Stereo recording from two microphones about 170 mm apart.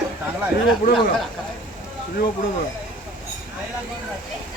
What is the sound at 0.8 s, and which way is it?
Speech, 55° left (ahead or behind).